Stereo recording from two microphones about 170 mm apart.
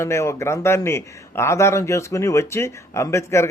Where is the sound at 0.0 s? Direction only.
15° left (ahead or behind).